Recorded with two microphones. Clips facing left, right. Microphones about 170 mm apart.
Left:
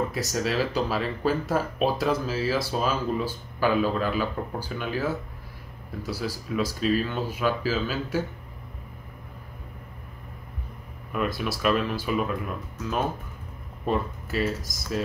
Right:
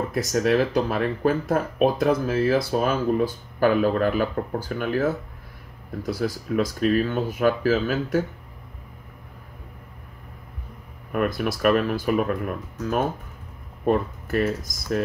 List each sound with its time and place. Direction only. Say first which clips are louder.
0.1 s speech: right 6 dB; 55° right (ahead or behind)
11.1 s speech: right 4 dB; 55° right (ahead or behind)
13.8 s speech: right 5 dB; 55° right (ahead or behind)